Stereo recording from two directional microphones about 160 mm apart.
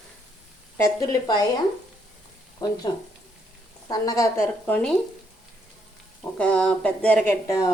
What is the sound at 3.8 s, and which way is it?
Speech, 20° left (ahead or behind).